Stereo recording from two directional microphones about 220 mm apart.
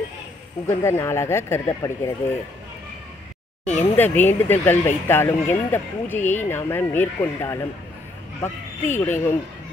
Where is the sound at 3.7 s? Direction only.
10° left (ahead or behind).